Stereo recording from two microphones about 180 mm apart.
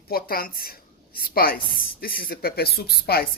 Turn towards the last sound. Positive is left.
turn(degrees=60)  # may be behind; listen again after turning